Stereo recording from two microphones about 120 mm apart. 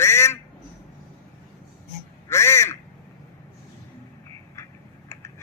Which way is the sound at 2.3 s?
25° left (ahead or behind).